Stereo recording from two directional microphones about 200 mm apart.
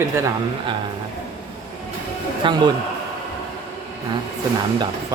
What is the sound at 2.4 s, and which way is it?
Speech, 25° right (ahead or behind).